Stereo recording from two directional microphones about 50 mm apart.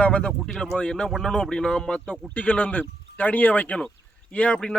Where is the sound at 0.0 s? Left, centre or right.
Left.